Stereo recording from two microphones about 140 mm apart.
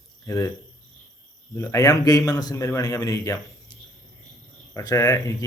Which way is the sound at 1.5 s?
25° left (ahead or behind).